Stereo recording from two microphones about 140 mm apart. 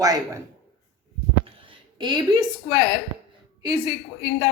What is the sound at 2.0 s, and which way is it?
Speech, 30° right (ahead or behind).